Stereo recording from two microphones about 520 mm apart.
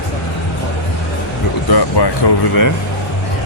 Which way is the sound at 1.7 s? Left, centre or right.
Left.